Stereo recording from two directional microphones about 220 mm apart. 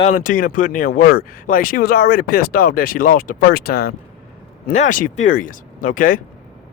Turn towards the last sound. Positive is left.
turn(degrees=40)  # may be behind; listen again after turning